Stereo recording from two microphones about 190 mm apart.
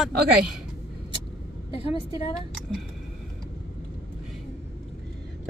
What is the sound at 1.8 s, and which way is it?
Speech, 30° left (ahead or behind).